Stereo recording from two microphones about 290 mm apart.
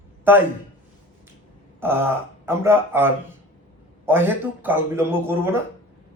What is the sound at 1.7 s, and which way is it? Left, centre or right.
A man's voice, centre.